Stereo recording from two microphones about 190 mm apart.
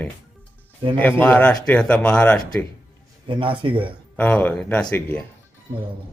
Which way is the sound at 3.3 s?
25° right (ahead or behind).